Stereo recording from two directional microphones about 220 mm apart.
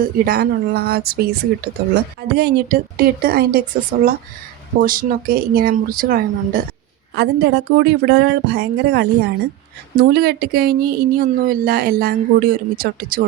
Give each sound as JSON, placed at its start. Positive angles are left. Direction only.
{"t": 0.0, "sound": "speech", "side_deg": -45}